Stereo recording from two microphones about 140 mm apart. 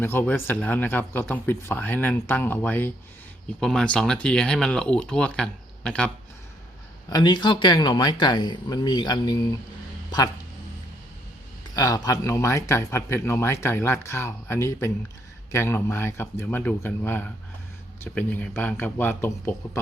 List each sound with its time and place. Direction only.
0.0 s speech: 15° left (ahead or behind)
7.1 s speech: 30° left (ahead or behind)
11.7 s speech: 25° left (ahead or behind)